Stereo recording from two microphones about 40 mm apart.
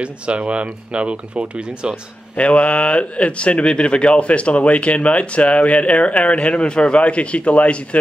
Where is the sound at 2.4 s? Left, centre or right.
Left.